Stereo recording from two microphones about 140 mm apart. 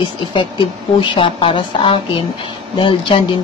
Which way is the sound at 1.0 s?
35° left (ahead or behind).